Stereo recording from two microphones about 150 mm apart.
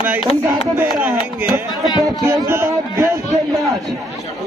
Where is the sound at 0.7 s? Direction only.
10° right (ahead or behind).